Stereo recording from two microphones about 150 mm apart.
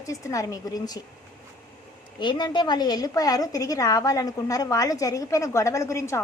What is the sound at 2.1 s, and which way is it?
A woman's voice, 30° left (ahead or behind).